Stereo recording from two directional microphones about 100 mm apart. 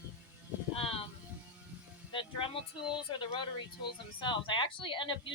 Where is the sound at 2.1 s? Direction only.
60° left (ahead or behind).